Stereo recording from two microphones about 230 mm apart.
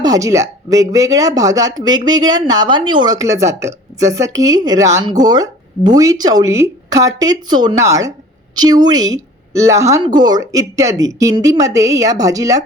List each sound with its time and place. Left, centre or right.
0.0 s speech: centre